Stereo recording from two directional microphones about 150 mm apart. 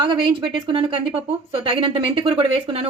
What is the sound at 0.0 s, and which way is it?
A woman's voice, 35° right (ahead or behind).